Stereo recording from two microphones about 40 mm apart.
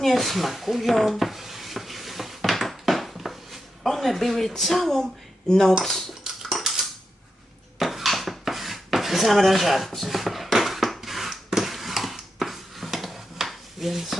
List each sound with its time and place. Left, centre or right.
0.0 s dishes: centre
3.8 s speech: centre
5.5 s cutlery: centre
6.4 s dishes: centre
7.8 s dishes: centre